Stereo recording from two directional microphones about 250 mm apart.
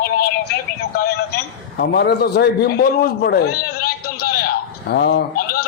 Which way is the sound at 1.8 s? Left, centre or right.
Left.